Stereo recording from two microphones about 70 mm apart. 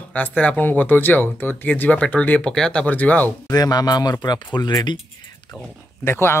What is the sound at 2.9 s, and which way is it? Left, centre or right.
Speech, left.